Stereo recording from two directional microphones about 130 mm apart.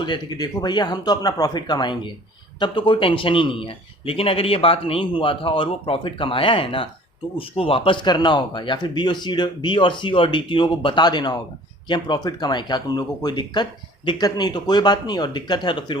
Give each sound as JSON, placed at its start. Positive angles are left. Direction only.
{"t": 0.0, "sound": "a man's voice", "side_deg": 35}